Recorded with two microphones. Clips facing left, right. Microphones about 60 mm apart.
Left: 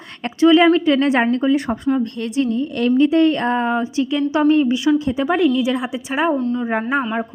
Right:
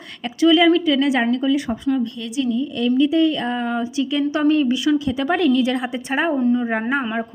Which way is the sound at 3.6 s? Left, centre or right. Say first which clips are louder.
Left 3 dB; left.